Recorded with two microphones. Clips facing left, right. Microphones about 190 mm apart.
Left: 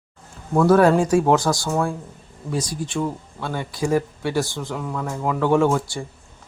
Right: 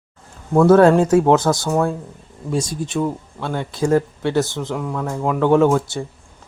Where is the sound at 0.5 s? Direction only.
25° right (ahead or behind).